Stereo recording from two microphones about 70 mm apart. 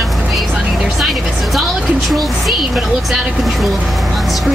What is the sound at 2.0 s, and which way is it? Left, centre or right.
Speech, centre.